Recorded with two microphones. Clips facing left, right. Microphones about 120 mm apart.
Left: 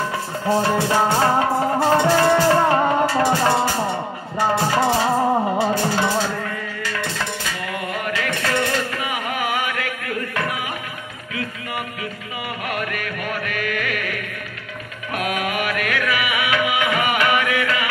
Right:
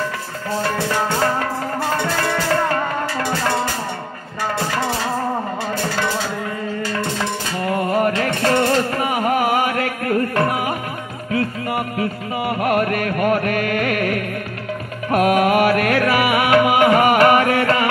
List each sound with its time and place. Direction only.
0.5 s music: 20° left (ahead or behind)
4.8 s music: 25° left (ahead or behind)
7.6 s music: 40° right (ahead or behind)
12.0 s music: 45° right (ahead or behind)